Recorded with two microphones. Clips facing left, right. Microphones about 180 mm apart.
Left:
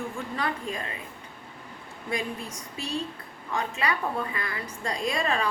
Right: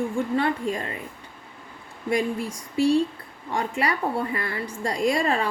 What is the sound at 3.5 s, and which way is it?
A woman's voice, 30° right (ahead or behind).